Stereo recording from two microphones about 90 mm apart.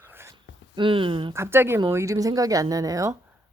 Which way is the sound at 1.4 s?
25° right (ahead or behind).